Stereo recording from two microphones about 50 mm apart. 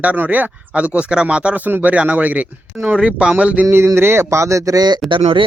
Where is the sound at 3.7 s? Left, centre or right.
Right.